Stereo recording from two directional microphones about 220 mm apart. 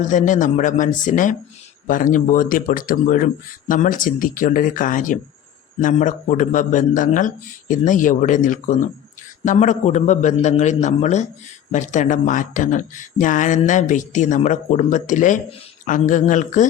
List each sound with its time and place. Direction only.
0.0 s speech: 35° left (ahead or behind)